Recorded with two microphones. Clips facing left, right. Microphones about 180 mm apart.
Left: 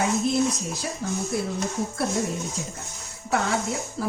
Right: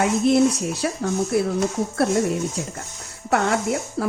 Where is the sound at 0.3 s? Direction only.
65° right (ahead or behind).